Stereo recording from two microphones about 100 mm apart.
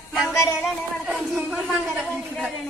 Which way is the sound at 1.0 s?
Centre (ahead or behind).